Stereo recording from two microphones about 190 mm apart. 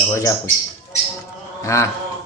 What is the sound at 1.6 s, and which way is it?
Speech, 15° left (ahead or behind).